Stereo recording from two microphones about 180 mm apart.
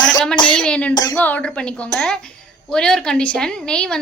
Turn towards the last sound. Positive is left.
turn(degrees=5)  # may be behind; listen again after turning